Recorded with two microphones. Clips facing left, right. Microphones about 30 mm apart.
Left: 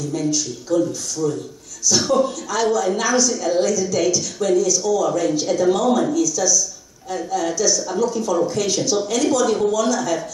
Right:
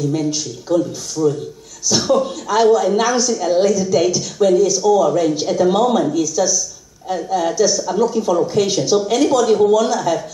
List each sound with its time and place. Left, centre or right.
0.0 s speech: right